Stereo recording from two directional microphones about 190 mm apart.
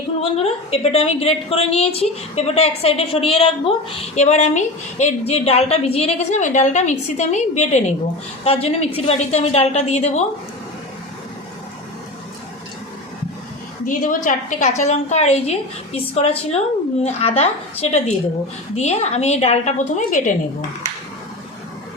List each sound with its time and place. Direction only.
0.2 s a woman's voice: 30° left (ahead or behind)
13.8 s a woman's voice: 45° left (ahead or behind)